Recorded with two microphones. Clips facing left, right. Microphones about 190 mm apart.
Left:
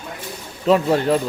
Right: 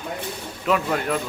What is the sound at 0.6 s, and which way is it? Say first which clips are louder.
Speech: left 6 dB; 30° left (ahead or behind).